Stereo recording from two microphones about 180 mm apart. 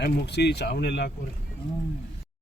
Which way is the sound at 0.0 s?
65° left (ahead or behind).